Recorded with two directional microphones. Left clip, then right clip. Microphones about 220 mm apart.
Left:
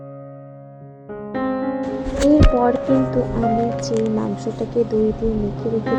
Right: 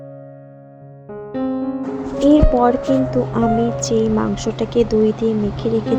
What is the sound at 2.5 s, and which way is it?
Speech, 10° right (ahead or behind).